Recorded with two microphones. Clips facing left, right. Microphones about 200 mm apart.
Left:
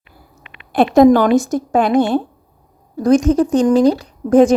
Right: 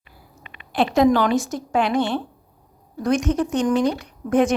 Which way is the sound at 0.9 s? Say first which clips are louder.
Left 8 dB; 45° left (ahead or behind).